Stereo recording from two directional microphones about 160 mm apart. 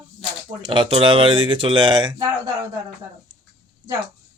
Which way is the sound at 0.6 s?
30° right (ahead or behind).